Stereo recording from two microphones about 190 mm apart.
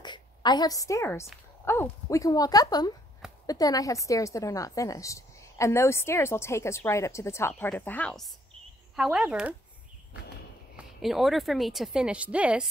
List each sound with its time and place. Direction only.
0.0 s a woman's voice: 20° left (ahead or behind); by 9.6 s 5° right (ahead or behind)
10.8 s speech: centre (ahead or behind)